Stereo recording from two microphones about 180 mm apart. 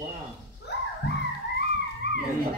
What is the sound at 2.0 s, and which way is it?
Vehicle, 65° left (ahead or behind).